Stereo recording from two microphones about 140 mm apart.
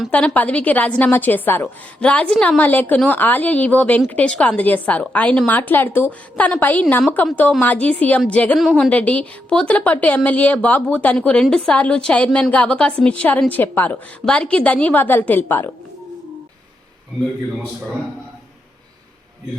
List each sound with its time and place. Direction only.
0.1 s a woman's voice: 10° left (ahead or behind)